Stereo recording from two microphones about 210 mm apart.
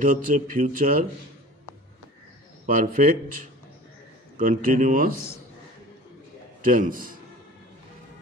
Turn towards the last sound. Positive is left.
turn(degrees=-40)  # may be behind; listen again after turning